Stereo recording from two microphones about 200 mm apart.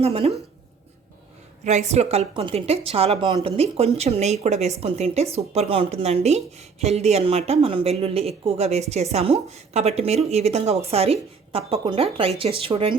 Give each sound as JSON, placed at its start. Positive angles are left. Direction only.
{"t": 0.0, "sound": "speech", "side_deg": -30}
{"t": 1.6, "sound": "speech", "side_deg": -35}